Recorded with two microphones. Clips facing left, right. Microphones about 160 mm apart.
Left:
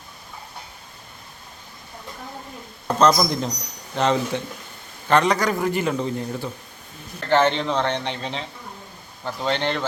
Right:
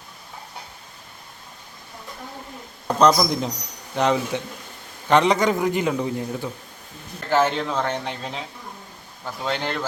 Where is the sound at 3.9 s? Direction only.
15° right (ahead or behind).